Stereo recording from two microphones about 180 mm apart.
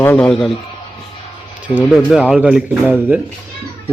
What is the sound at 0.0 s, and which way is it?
Speech, 10° left (ahead or behind).